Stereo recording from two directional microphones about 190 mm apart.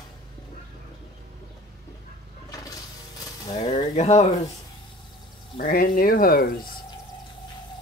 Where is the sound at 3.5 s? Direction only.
35° left (ahead or behind).